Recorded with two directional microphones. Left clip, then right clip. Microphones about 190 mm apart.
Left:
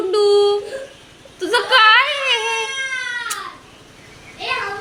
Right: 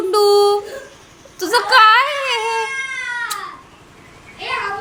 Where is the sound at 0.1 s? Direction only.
20° right (ahead or behind).